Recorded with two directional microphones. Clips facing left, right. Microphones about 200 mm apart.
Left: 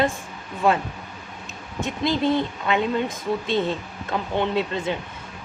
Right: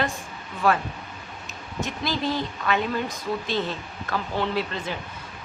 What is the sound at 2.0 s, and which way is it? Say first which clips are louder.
Speech: left 6 dB; 25° left (ahead or behind).